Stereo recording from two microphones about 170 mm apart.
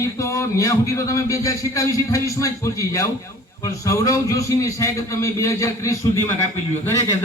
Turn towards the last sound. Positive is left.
turn(degrees=20)  # may be behind; listen again after turning